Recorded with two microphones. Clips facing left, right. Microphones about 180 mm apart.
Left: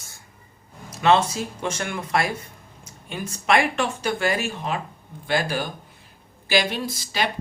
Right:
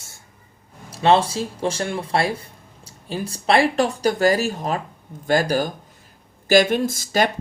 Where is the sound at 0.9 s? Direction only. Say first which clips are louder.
Right 2 dB; 30° right (ahead or behind).